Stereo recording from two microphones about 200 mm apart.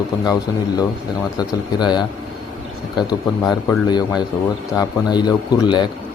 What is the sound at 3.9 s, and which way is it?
Speech, 20° left (ahead or behind).